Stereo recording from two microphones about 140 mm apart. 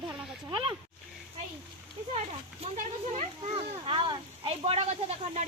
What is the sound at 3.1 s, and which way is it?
Speech, 50° right (ahead or behind).